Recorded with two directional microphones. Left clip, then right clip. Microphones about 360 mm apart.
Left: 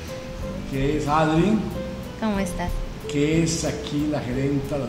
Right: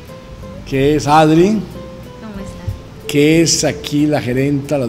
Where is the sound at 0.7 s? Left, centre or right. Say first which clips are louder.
Right 11 dB; right.